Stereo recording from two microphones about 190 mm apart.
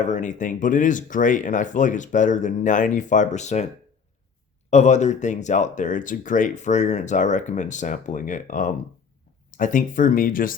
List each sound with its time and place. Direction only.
0.0 s speech: 40° left (ahead or behind)
4.7 s speech: 40° left (ahead or behind)